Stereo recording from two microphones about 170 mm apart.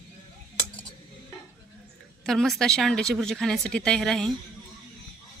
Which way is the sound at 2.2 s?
Centre (ahead or behind).